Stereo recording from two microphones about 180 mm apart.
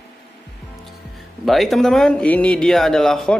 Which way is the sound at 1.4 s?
Centre (ahead or behind).